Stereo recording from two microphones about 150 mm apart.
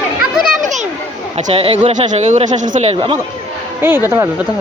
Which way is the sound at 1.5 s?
40° right (ahead or behind).